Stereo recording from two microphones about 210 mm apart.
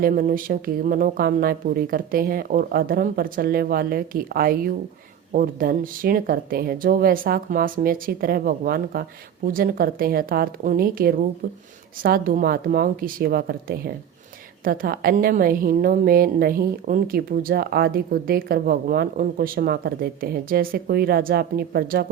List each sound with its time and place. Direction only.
0.0 s a woman's voice: 40° right (ahead or behind)